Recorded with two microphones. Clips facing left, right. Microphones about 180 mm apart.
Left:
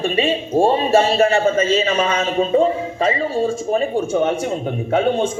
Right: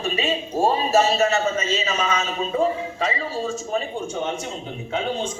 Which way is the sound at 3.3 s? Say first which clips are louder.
Left 7 dB; 50° left (ahead or behind).